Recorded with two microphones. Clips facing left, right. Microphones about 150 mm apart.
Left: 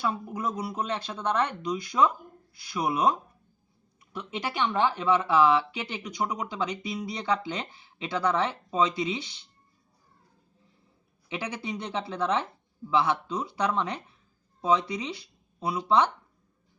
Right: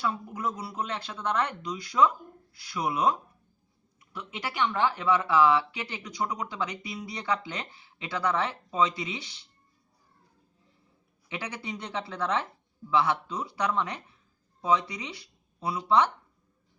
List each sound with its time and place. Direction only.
0.0 s speech: 20° left (ahead or behind)
11.3 s speech: 20° left (ahead or behind)